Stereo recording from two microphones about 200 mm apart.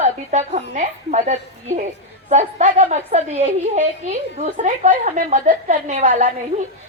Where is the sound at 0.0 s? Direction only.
35° right (ahead or behind).